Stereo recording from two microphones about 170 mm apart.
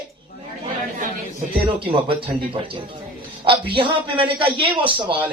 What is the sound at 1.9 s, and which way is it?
Speech, 30° right (ahead or behind).